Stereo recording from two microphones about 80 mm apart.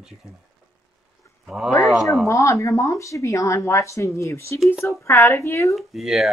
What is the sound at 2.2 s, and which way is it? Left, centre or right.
Speech, left.